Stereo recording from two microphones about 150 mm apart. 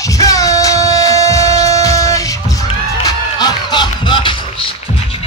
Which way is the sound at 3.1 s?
25° left (ahead or behind).